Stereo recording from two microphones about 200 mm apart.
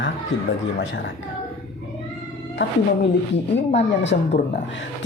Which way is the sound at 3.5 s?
60° left (ahead or behind).